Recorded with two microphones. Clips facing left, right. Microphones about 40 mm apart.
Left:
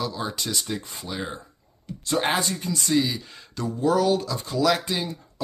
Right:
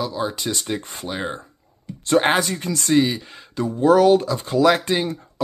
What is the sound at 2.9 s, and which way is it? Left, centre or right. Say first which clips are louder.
Speech: right 6 dB; right.